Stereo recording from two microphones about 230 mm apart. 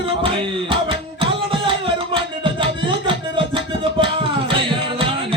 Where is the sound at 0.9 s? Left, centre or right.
Right.